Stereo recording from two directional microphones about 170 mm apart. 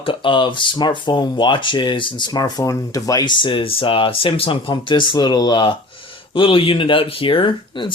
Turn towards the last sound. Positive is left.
turn(degrees=30)  # may be behind; listen again after turning